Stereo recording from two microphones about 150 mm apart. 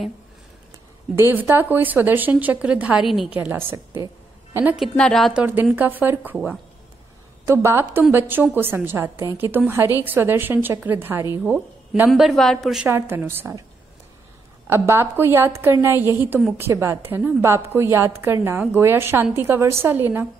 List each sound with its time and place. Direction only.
1.1 s a woman's voice: 15° right (ahead or behind)
3.3 s a woman's voice: 15° right (ahead or behind)
4.7 s a woman's voice: centre (ahead or behind)
12.8 s a woman's voice: 15° right (ahead or behind)
14.7 s a woman's voice: 15° right (ahead or behind)